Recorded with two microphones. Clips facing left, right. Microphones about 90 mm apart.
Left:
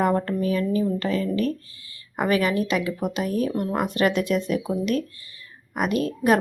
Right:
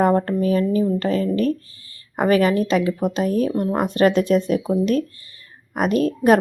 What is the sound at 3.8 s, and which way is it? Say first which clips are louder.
Speech: right 5 dB; 35° right (ahead or behind).